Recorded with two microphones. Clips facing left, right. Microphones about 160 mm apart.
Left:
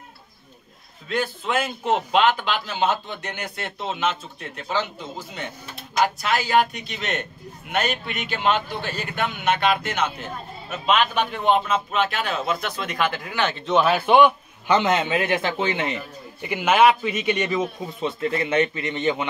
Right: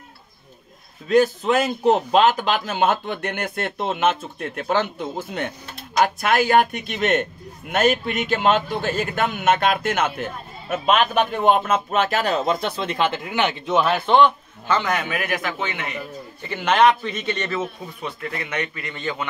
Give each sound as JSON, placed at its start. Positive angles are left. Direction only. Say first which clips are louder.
{"t": 1.0, "sound": "a man's voice", "louder": "right 9 dB", "side_deg": -40}
{"t": 13.7, "sound": "a man's voice", "louder": "left 2 dB", "side_deg": 0}
{"t": 14.8, "sound": "speech", "louder": "left 3 dB", "side_deg": 20}
{"t": 16.3, "sound": "speech", "louder": "even", "side_deg": 10}